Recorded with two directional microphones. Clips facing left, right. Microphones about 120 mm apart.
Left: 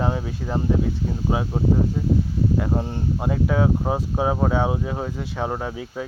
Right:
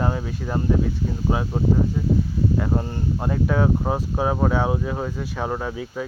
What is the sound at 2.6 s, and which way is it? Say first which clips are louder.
Speech: even; 10° left (ahead or behind).